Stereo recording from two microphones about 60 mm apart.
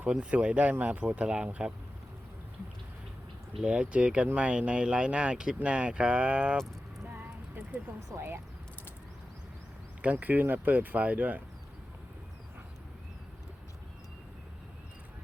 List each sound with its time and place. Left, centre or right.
0.1 s speech: centre
3.7 s speech: centre
8.1 s speech: right
10.0 s speech: right